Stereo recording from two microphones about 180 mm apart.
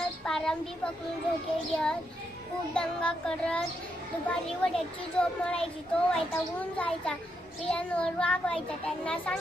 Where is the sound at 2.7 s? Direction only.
5° left (ahead or behind).